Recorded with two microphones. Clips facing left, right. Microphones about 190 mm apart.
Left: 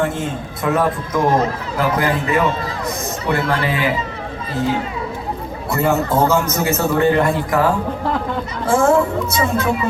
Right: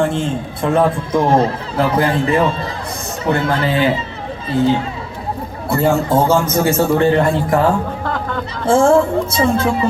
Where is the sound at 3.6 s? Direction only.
30° right (ahead or behind).